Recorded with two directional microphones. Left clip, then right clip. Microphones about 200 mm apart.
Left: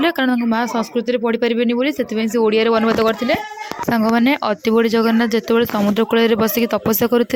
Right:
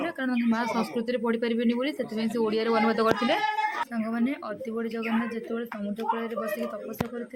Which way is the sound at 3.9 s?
45° left (ahead or behind).